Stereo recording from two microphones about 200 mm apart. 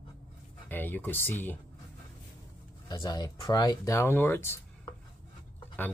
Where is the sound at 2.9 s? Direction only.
20° left (ahead or behind).